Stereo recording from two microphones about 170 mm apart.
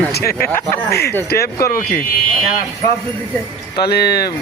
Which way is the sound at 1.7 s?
55° left (ahead or behind).